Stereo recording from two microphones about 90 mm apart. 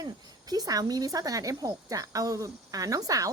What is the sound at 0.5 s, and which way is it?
A woman's voice, 45° right (ahead or behind).